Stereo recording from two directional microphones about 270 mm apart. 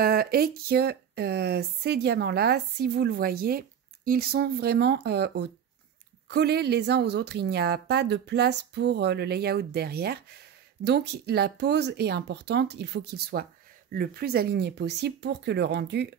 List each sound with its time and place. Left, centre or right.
0.0 s speech: right